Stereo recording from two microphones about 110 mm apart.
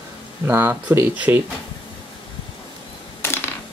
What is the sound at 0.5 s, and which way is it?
Speech, 25° right (ahead or behind).